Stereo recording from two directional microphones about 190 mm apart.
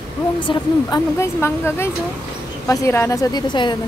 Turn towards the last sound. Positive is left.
turn(degrees=25)  # may be behind; listen again after turning